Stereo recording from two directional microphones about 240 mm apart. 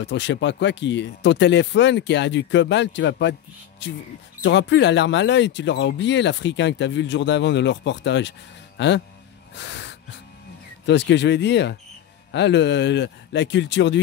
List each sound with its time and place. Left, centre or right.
0.0 s speech: left
9.6 s wheeze: left
10.9 s speech: left